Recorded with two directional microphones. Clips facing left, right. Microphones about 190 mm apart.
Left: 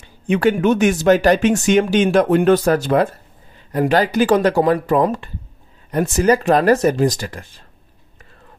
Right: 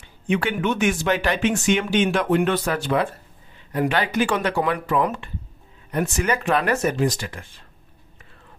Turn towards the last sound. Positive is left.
turn(degrees=40)  # may be behind; listen again after turning